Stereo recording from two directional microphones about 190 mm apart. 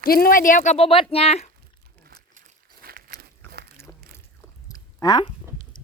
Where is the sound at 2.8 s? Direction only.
50° right (ahead or behind).